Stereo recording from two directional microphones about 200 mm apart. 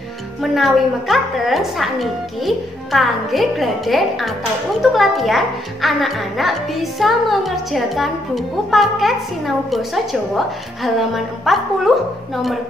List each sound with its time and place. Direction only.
0.4 s a child's voice: centre (ahead or behind)